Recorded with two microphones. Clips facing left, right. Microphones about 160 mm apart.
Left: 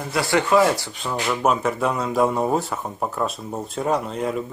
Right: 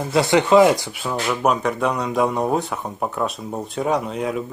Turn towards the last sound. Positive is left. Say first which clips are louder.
# right 1 dB
turn(degrees=0)  # may be behind; listen again after turning